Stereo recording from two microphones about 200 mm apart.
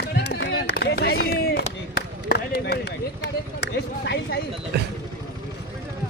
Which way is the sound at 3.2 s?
60° left (ahead or behind).